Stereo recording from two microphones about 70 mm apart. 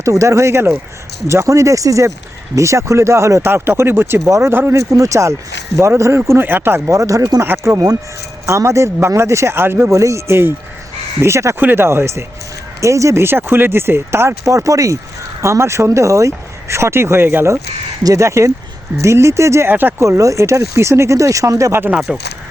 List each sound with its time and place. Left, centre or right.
0.0 s speech: right
3.5 s speech: right
4.8 s speech: right
6.8 s speech: right
7.4 s speech: right
8.4 s speech: right
9.9 s speech: right
11.6 s speech: right
18.0 s speech: right
22.1 s speech: centre